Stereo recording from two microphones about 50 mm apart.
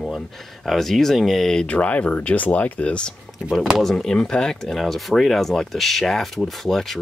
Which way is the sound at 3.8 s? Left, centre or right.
Centre.